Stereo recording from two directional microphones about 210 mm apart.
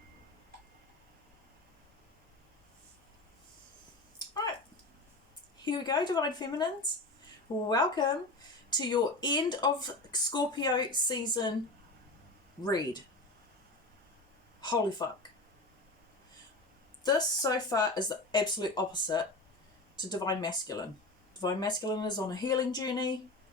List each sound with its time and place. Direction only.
5.6 s speech: 20° left (ahead or behind)
7.7 s speech: 20° left (ahead or behind)
12.6 s speech: 20° left (ahead or behind)
14.6 s speech: 20° left (ahead or behind)
17.0 s speech: 20° left (ahead or behind)